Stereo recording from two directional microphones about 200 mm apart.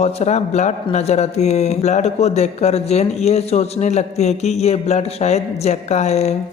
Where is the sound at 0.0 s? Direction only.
35° left (ahead or behind).